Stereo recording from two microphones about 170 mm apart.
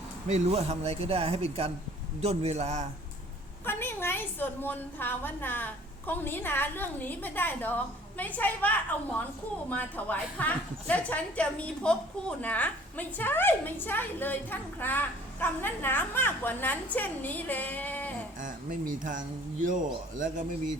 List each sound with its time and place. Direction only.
0.3 s speech: 40° right (ahead or behind)
3.7 s a woman's voice: 15° left (ahead or behind)
18.3 s speech: 50° right (ahead or behind)